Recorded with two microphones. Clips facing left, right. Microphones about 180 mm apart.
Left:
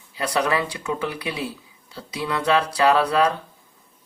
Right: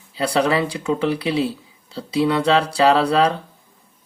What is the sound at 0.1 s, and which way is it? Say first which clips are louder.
Speech: right 4 dB; 30° right (ahead or behind).